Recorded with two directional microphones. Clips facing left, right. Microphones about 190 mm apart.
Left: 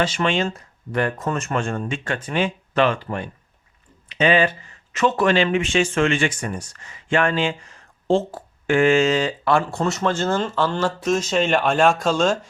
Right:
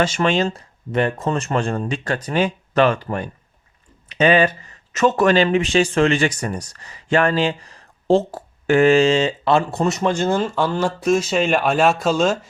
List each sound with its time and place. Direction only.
0.0 s speech: 45° right (ahead or behind); by 12.5 s 5° right (ahead or behind)